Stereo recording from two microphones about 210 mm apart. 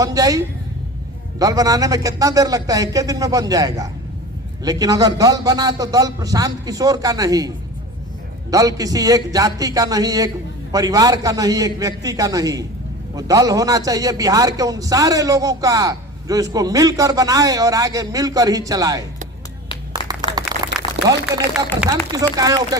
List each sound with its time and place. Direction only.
0.0 s a man's voice: 15° right (ahead or behind)
20.0 s a sound: 20° left (ahead or behind)
21.0 s a man's voice: 20° right (ahead or behind)